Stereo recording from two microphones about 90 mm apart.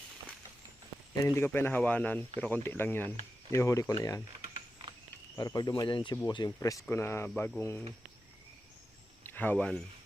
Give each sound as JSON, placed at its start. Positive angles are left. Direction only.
{"t": 1.5, "sound": "speech", "side_deg": 20}
{"t": 5.4, "sound": "speech", "side_deg": 45}
{"t": 5.9, "sound": "speech", "side_deg": 60}
{"t": 6.6, "sound": "speech", "side_deg": 40}
{"t": 6.9, "sound": "speech", "side_deg": 30}
{"t": 9.3, "sound": "speech", "side_deg": 20}